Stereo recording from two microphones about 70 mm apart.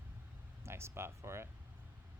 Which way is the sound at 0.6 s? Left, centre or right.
Right.